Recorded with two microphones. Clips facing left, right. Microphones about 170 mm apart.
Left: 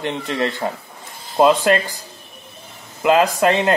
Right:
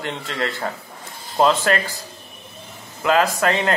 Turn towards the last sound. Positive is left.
turn(degrees=20)  # may be behind; listen again after turning